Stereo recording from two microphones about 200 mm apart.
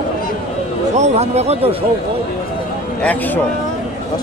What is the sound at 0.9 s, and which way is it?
Speech, 35° right (ahead or behind).